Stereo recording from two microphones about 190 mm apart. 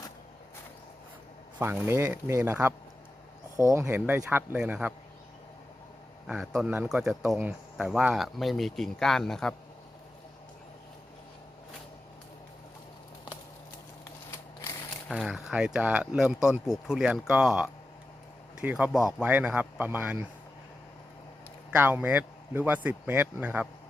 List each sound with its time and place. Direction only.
1.5 s speech: 10° right (ahead or behind)
6.2 s speech: 5° right (ahead or behind)
14.0 s a sound: 15° left (ahead or behind)
15.1 s speech: 5° right (ahead or behind)
21.8 s speech: 10° right (ahead or behind)